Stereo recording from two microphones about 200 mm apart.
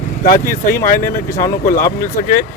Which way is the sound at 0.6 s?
15° left (ahead or behind).